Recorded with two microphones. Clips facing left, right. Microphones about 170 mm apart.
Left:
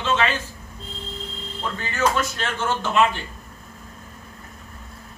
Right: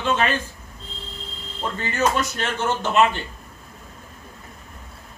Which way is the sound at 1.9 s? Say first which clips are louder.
Even; 20° right (ahead or behind).